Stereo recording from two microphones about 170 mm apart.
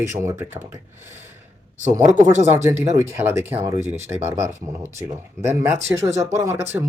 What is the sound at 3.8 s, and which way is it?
Speech, 40° right (ahead or behind).